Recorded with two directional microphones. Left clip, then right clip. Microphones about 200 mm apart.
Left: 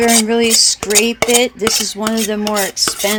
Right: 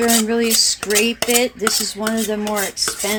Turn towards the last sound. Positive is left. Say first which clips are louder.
# left 5 dB
turn(degrees=45)  # may be behind; listen again after turning